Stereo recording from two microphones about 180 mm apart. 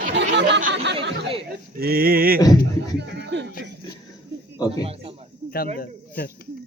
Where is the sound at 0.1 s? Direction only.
75° right (ahead or behind).